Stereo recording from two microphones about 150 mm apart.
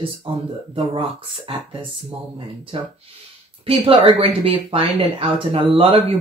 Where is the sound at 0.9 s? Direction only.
35° right (ahead or behind).